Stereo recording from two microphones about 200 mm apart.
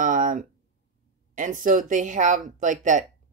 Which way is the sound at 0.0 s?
40° right (ahead or behind).